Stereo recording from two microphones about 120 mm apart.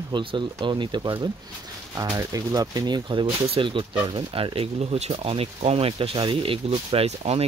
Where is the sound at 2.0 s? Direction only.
30° right (ahead or behind).